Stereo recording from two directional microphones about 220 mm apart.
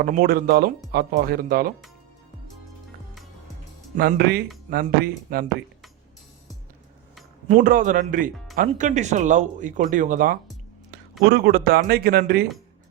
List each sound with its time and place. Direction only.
0.0 s speech: 40° right (ahead or behind)
3.9 s speech: 45° right (ahead or behind)
7.4 s speech: 40° right (ahead or behind)